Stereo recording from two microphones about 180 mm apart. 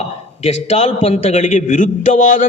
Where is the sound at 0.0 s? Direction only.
35° left (ahead or behind).